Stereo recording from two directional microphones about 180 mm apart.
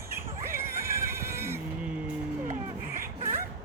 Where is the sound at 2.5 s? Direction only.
50° right (ahead or behind).